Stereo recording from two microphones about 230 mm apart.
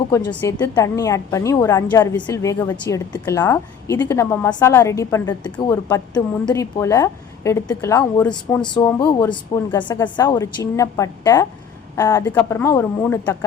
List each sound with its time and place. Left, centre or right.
0.1 s a woman's voice: centre